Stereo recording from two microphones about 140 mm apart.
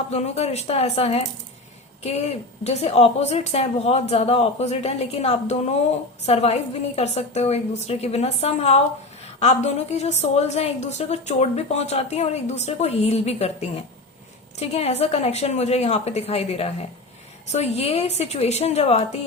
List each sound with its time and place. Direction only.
0.1 s a woman's voice: 50° left (ahead or behind)
2.6 s a woman's voice: 50° left (ahead or behind)